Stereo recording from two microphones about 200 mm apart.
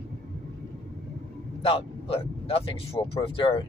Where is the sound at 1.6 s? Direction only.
30° left (ahead or behind).